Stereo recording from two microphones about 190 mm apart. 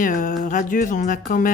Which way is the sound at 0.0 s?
45° left (ahead or behind).